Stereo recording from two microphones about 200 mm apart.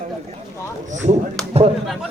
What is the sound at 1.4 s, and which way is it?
Speech, centre (ahead or behind).